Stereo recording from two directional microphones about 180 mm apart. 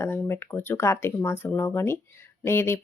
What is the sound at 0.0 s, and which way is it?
Speech, 15° left (ahead or behind).